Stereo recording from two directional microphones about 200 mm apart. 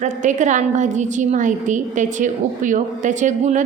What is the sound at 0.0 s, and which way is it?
A woman's voice, 40° right (ahead or behind).